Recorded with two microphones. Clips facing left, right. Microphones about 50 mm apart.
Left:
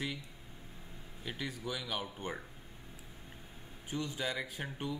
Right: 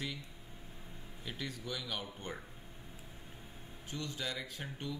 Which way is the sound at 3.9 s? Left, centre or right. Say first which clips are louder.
Left 4 dB; centre.